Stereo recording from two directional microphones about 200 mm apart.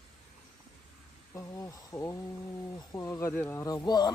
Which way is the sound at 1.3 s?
15° left (ahead or behind).